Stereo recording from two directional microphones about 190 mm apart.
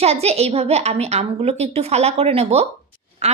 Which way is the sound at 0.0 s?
35° right (ahead or behind).